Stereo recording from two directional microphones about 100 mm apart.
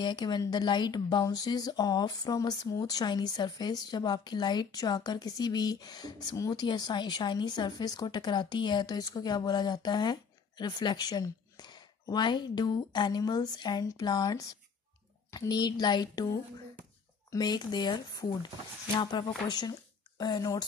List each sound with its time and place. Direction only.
0.0 s speech: 50° left (ahead or behind)